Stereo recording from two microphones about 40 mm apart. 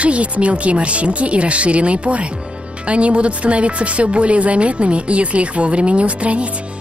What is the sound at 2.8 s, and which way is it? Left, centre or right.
Speech, right.